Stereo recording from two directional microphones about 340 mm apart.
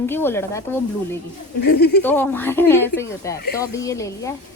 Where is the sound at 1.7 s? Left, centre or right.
Left.